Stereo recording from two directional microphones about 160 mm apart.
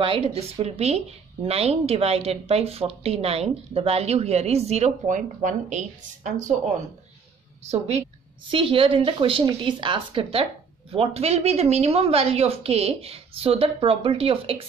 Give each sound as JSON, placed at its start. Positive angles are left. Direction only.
{"t": 0.0, "sound": "speech", "side_deg": -35}
{"t": 7.7, "sound": "a woman's voice", "side_deg": -45}